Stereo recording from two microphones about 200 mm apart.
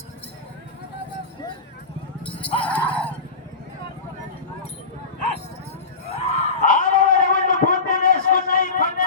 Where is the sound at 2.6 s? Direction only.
5° left (ahead or behind).